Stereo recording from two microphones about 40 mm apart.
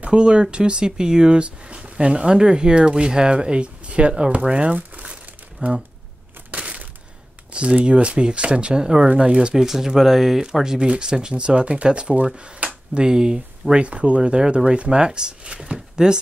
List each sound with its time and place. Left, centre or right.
0.0 s speech: right
4.2 s crumpling: right
6.5 s a sound: right
7.5 s speech: right
9.6 s speech: centre
13.8 s speech: right